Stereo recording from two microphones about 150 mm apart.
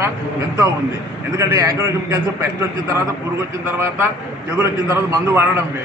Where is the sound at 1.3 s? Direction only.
20° right (ahead or behind).